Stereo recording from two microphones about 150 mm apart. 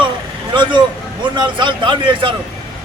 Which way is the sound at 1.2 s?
30° right (ahead or behind).